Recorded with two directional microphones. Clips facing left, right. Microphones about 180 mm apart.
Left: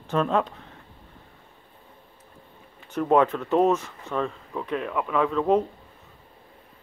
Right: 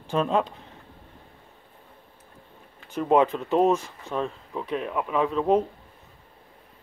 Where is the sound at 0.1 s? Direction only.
15° right (ahead or behind).